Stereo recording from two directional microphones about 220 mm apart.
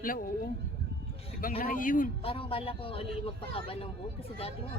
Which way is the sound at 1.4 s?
40° left (ahead or behind).